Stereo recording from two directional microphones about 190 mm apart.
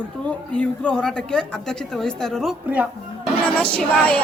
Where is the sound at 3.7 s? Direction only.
5° left (ahead or behind).